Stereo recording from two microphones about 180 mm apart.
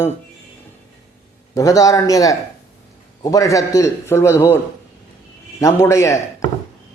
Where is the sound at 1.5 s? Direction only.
20° left (ahead or behind).